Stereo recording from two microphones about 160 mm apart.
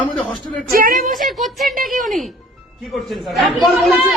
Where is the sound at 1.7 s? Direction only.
60° right (ahead or behind).